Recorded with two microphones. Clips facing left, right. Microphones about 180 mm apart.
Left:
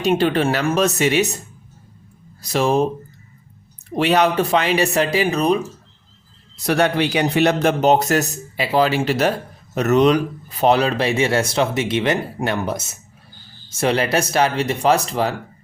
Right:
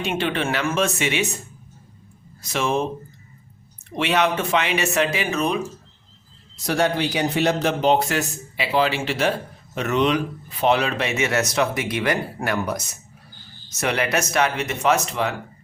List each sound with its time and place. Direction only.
0.0 s speech: 40° left (ahead or behind)
2.4 s speech: 35° left (ahead or behind)
3.9 s speech: 40° left (ahead or behind)
6.7 s a man's voice: 65° left (ahead or behind); by 15.4 s 35° left (ahead or behind)